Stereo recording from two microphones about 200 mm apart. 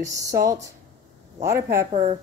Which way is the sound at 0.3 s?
15° right (ahead or behind).